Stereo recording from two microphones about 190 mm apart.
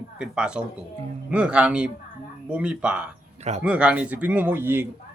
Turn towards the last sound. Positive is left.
turn(degrees=-10)  # may be behind; listen again after turning